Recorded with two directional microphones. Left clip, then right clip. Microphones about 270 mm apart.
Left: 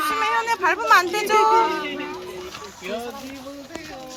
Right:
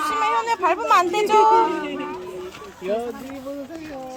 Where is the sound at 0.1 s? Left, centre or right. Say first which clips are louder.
Right 1 dB; right.